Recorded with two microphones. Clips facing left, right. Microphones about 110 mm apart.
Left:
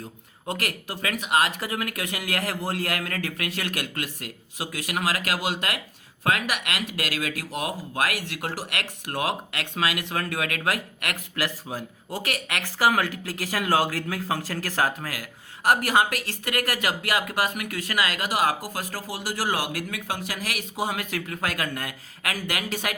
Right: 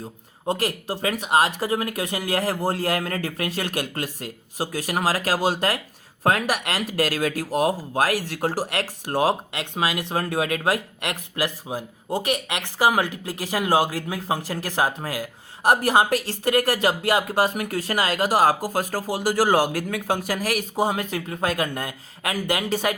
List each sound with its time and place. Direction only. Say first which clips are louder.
0.4 s speech: right 6 dB; 30° right (ahead or behind)